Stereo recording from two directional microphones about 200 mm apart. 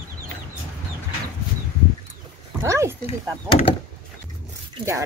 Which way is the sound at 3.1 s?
30° left (ahead or behind).